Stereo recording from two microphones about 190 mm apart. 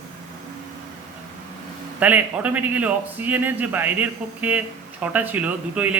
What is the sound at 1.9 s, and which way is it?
Speech, 10° right (ahead or behind).